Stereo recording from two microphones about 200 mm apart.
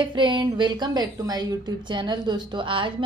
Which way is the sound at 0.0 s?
25° right (ahead or behind).